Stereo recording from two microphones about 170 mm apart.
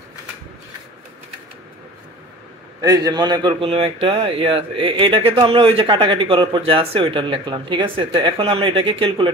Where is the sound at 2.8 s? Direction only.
20° right (ahead or behind).